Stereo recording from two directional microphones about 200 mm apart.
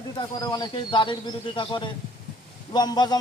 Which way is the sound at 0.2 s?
20° left (ahead or behind).